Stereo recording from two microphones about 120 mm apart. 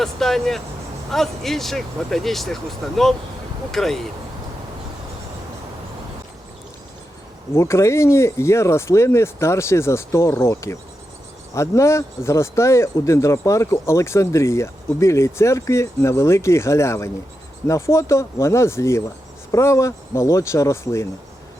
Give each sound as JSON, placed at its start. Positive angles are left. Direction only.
{"t": 0.0, "sound": "speech", "side_deg": 0}
{"t": 7.5, "sound": "speech", "side_deg": 25}